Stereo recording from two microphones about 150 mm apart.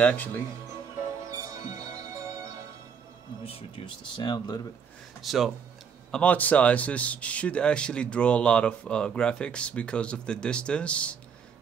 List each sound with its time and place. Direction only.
0.0 s speech: 10° left (ahead or behind)
1.3 s music: 20° right (ahead or behind)
3.4 s speech: 35° left (ahead or behind)
5.2 s speech: centre (ahead or behind)
6.1 s speech: 10° left (ahead or behind)